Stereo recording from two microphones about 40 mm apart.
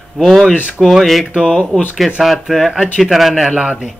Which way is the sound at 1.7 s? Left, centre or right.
Left.